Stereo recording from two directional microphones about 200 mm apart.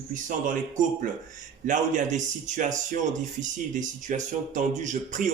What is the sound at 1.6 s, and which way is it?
Speech, 40° right (ahead or behind).